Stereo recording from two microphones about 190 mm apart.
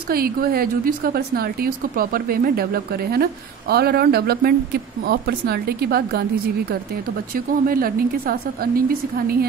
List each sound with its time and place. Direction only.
0.1 s a woman's voice: 50° right (ahead or behind)
7.3 s a woman's voice: 50° right (ahead or behind)